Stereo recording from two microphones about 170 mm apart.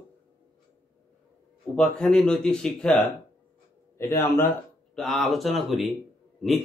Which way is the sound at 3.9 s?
15° left (ahead or behind).